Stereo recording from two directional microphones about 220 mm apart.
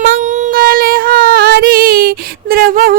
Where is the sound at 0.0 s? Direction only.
35° right (ahead or behind).